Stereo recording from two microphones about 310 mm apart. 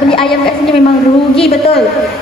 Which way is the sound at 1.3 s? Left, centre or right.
Centre.